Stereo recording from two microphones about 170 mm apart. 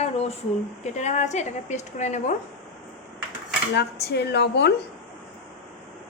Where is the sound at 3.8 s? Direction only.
80° left.